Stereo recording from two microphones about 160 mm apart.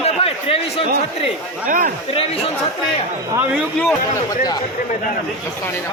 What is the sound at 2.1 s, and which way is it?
Speech, 35° left (ahead or behind).